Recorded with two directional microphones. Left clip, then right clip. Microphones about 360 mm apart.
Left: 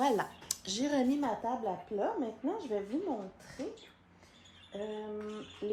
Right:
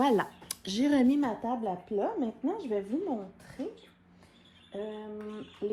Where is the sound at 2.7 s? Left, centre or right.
Right.